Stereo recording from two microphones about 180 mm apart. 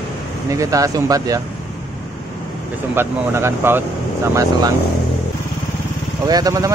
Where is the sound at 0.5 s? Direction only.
20° right (ahead or behind).